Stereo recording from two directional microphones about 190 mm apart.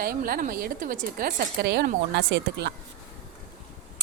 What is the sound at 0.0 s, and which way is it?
A woman's voice, 50° right (ahead or behind).